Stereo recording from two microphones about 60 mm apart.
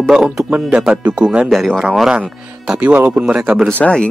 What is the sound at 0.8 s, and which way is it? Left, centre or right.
Speech, centre.